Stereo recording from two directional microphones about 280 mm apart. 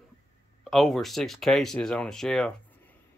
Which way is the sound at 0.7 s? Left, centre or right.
Centre.